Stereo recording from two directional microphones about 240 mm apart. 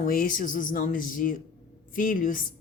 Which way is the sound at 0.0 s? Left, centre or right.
Left.